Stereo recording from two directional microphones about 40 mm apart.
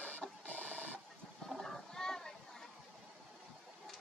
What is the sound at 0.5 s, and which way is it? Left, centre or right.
Printer, left.